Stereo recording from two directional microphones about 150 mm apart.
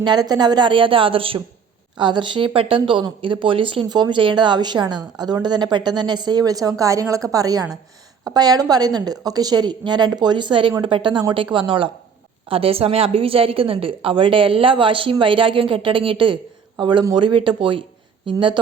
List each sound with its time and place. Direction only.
0.0 s a woman's voice: 30° right (ahead or behind)